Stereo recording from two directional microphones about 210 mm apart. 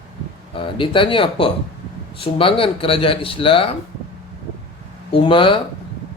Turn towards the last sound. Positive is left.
turn(degrees=25)  # may be behind; listen again after turning